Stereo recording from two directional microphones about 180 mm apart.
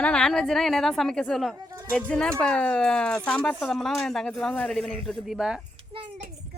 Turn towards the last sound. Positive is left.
turn(degrees=-5)  # may be behind; listen again after turning